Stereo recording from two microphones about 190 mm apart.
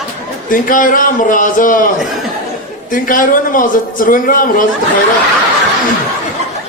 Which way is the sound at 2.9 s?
45° left (ahead or behind).